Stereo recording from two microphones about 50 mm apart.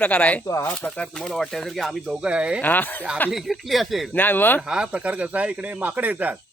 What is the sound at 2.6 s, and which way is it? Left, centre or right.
Speech, left.